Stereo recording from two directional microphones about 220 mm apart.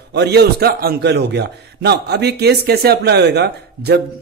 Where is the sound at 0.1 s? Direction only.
50° right (ahead or behind).